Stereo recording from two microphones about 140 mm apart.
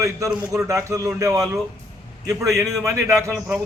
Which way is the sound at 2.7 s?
20° right (ahead or behind).